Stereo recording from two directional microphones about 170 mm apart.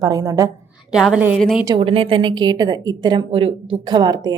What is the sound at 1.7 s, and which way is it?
A woman's voice, 30° right (ahead or behind).